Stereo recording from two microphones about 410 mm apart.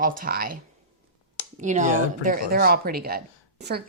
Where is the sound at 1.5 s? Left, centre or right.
Centre.